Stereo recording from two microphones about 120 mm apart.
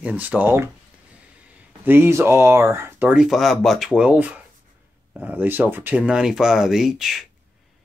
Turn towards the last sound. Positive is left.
turn(degrees=-5)  # may be behind; listen again after turning